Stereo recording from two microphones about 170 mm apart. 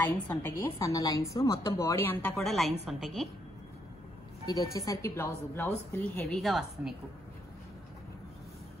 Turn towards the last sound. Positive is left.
turn(degrees=0)  # may be behind; listen again after turning